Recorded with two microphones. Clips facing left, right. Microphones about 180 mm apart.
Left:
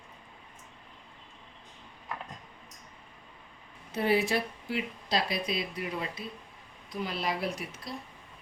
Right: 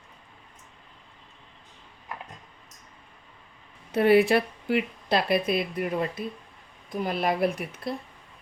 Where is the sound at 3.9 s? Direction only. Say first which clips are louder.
Right 8 dB; 60° right (ahead or behind).